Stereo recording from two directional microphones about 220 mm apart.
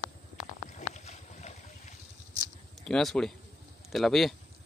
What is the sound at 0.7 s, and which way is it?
Boat, 35° left (ahead or behind).